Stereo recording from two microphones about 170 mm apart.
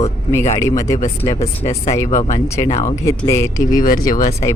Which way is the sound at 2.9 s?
15° left (ahead or behind).